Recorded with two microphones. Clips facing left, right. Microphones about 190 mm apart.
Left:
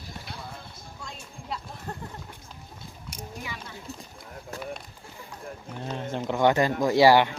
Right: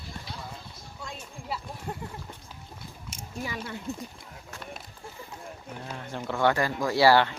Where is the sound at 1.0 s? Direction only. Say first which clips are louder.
Right 3 dB; 5° right (ahead or behind).